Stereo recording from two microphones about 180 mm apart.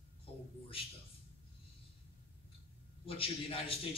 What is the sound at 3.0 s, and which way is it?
Speech, 30° left (ahead or behind).